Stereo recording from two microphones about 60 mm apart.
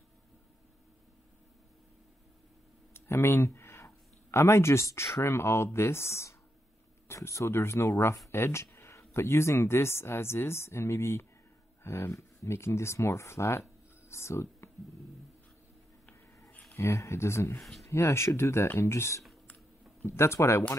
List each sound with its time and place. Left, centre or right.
2.9 s speech: left
16.7 s speech: left
17.6 s speech: centre
17.8 s speech: left